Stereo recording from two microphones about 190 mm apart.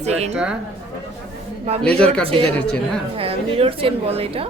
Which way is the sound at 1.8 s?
5° left (ahead or behind).